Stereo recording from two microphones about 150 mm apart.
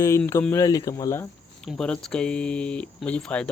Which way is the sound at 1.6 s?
5° left (ahead or behind).